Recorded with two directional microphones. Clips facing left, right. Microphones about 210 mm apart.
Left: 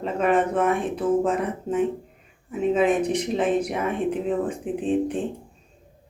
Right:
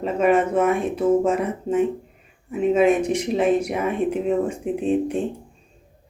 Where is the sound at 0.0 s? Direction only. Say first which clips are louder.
Right 3 dB; 10° right (ahead or behind).